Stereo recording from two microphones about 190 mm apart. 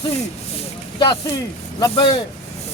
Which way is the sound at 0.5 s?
25° left (ahead or behind).